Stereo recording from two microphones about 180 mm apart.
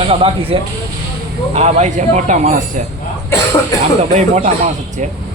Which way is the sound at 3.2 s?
15° left (ahead or behind).